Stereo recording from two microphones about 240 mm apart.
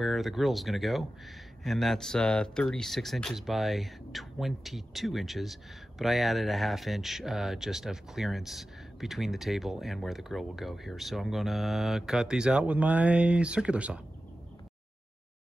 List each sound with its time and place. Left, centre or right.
0.0 s speech: centre